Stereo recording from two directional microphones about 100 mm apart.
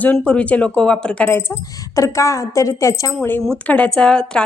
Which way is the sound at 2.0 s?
30° left (ahead or behind).